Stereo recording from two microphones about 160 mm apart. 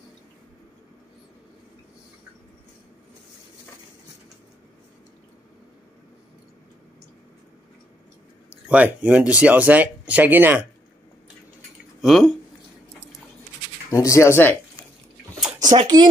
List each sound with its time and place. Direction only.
8.6 s speech: 10° right (ahead or behind)
12.0 s speech: centre (ahead or behind)
13.8 s speech: 20° left (ahead or behind)
15.7 s speech: 25° right (ahead or behind)